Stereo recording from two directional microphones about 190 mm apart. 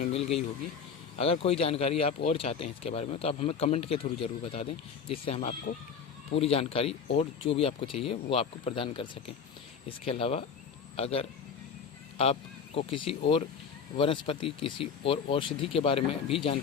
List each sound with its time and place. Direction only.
0.0 s speech: 30° left (ahead or behind)